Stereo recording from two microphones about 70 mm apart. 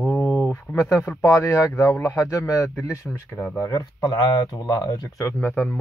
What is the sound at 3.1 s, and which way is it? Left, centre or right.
Speech, centre.